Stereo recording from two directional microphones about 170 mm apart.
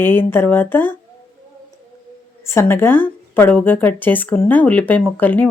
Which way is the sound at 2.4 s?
15° left (ahead or behind).